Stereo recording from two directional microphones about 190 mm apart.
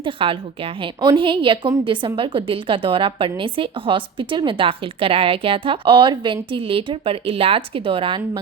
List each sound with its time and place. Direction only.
0.0 s a woman's voice: 30° right (ahead or behind)